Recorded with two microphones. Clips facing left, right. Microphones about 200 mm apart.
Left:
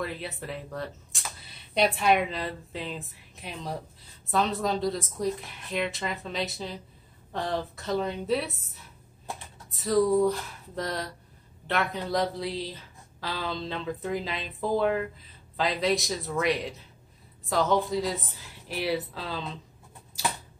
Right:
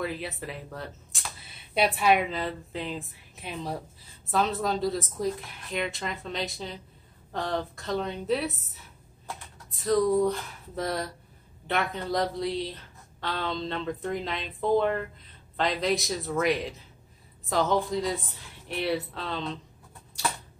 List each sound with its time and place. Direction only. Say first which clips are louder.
0.0 s a woman's voice: right 1 dB; centre (ahead or behind)
9.8 s a woman's voice: left 1 dB; centre (ahead or behind)